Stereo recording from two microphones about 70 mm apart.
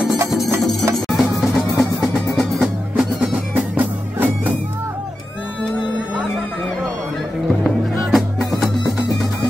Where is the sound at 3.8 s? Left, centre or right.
Right.